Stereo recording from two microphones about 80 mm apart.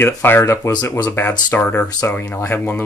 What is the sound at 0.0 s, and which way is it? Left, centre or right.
Speech, left.